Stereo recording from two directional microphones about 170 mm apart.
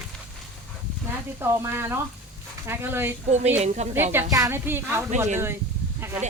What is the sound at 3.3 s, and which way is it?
Speech, 40° right (ahead or behind).